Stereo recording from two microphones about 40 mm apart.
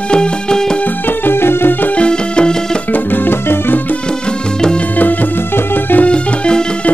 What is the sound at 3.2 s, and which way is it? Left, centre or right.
Music, left.